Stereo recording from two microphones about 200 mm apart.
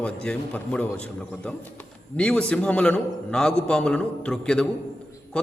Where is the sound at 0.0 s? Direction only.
5° left (ahead or behind).